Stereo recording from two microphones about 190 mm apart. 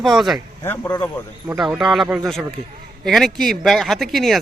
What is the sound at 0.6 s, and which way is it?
Speech, 10° left (ahead or behind).